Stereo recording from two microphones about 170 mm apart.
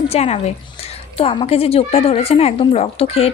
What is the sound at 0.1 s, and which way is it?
A woman's voice, 40° left (ahead or behind).